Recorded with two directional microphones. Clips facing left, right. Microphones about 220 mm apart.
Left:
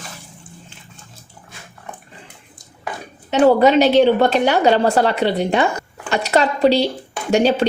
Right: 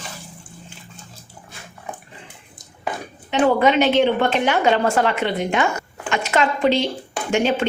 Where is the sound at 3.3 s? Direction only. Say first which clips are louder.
Left 4 dB; 40° left (ahead or behind).